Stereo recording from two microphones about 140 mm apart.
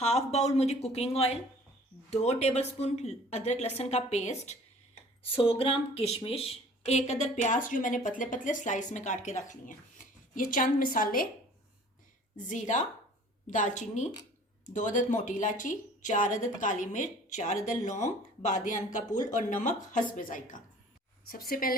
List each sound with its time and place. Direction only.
0.0 s a woman's voice: 50° left (ahead or behind)
5.2 s a woman's voice: 40° left (ahead or behind); by 11.3 s 90° left
12.5 s a woman's voice: 65° left (ahead or behind)
21.2 s a woman's voice: 90° left